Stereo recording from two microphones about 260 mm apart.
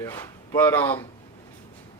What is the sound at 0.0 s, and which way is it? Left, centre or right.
Speech, centre.